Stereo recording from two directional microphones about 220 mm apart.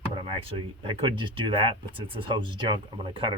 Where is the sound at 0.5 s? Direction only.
25° right (ahead or behind).